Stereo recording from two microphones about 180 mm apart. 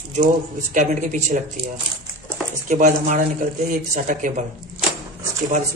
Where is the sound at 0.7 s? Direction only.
45° right (ahead or behind).